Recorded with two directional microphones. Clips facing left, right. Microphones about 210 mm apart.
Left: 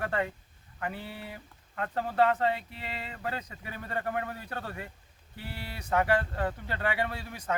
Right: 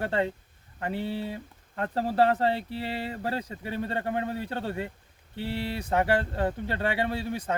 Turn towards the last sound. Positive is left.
turn(degrees=-30)  # may be behind; listen again after turning